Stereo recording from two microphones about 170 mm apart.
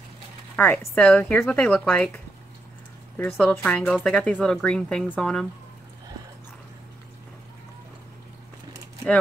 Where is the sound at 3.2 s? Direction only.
5° left (ahead or behind).